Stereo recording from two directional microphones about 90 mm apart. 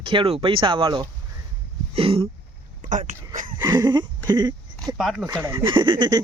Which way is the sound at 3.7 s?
55° right (ahead or behind).